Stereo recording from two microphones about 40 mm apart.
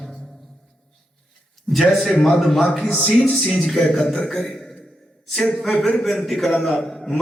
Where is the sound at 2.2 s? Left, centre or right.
Centre.